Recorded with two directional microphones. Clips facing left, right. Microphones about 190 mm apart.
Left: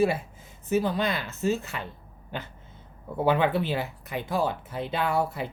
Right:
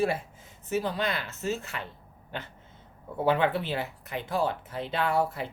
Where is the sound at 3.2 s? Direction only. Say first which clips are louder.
Left 2 dB; 15° left (ahead or behind).